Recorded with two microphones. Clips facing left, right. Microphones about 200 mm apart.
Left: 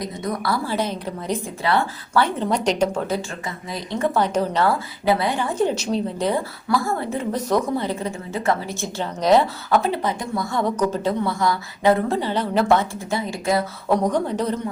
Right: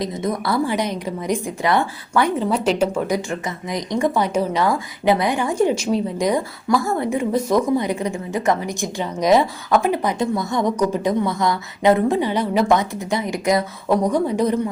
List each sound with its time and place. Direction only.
0.0 s a woman's voice: 20° right (ahead or behind)
2.3 s a woman's voice: 5° right (ahead or behind)